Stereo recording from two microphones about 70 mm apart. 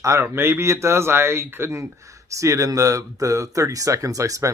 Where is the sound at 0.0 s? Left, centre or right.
Right.